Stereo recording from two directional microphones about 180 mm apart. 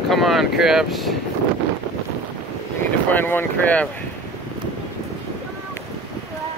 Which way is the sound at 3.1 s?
10° left (ahead or behind).